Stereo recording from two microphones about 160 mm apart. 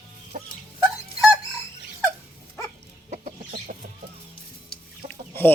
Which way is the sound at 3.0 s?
50° right (ahead or behind).